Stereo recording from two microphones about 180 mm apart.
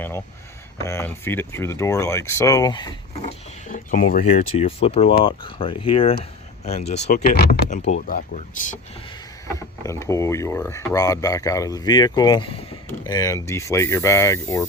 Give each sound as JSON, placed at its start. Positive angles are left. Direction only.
{"t": 0.9, "sound": "speech", "side_deg": 15}
{"t": 3.2, "sound": "speech", "side_deg": 35}
{"t": 3.9, "sound": "speech", "side_deg": 50}
{"t": 4.3, "sound": "speech", "side_deg": 35}
{"t": 9.5, "sound": "speech", "side_deg": 15}